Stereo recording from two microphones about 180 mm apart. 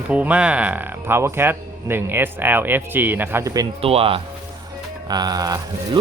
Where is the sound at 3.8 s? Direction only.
30° right (ahead or behind).